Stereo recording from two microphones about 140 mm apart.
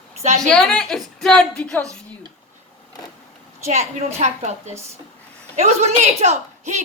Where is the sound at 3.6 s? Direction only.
55° right (ahead or behind).